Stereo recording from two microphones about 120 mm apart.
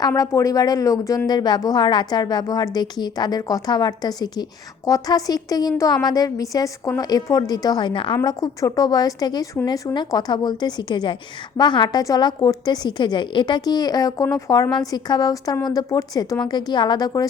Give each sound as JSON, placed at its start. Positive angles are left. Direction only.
{"t": 0.2, "sound": "a woman's voice", "side_deg": 25}